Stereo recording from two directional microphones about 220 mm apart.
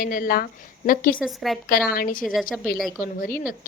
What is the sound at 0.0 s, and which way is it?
Speech, 40° left (ahead or behind).